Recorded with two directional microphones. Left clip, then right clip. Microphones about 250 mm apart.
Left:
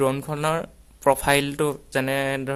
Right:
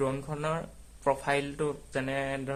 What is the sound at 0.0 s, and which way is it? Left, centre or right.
A man's voice, left.